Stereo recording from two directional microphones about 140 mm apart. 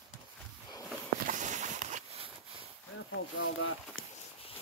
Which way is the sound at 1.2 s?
60° right (ahead or behind).